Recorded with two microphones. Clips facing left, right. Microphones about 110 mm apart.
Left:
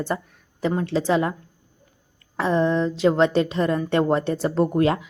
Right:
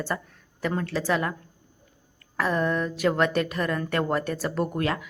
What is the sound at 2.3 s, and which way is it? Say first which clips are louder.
Speech: left 5 dB; 20° left (ahead or behind).